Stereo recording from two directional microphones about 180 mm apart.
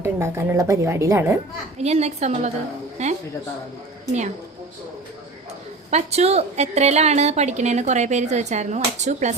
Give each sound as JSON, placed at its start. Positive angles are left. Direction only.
{"t": 0.0, "sound": "a woman's voice", "side_deg": -15}
{"t": 1.8, "sound": "a woman's voice", "side_deg": -35}
{"t": 5.9, "sound": "a woman's voice", "side_deg": -35}